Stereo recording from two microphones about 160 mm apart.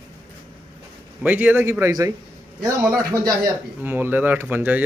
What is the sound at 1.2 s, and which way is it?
Speech, 10° right (ahead or behind).